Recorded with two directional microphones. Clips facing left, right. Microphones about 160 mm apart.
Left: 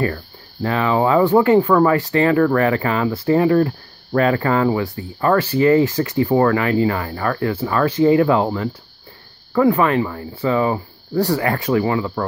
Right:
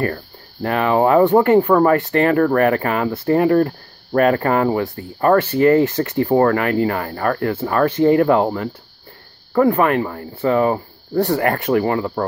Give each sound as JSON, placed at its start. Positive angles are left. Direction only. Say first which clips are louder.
{"t": 0.0, "sound": "speech", "louder": "even", "side_deg": -50}
{"t": 9.5, "sound": "speech", "louder": "even", "side_deg": -45}